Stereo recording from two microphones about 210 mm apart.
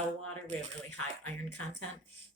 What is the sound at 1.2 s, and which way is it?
Speech, 90° left.